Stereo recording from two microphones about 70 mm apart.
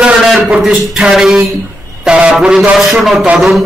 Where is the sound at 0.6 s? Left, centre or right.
Centre.